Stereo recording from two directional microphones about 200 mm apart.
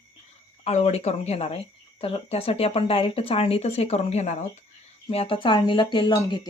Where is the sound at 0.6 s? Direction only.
35° left (ahead or behind).